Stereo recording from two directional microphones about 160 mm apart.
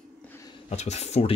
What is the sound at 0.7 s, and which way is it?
Speech, 45° left (ahead or behind).